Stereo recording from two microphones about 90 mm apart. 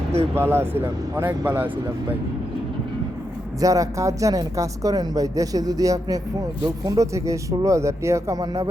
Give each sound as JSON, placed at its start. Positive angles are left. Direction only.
{"t": 0.3, "sound": "speech", "side_deg": -25}
{"t": 3.6, "sound": "speech", "side_deg": -40}